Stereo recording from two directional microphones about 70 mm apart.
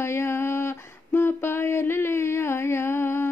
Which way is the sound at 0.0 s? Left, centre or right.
Left.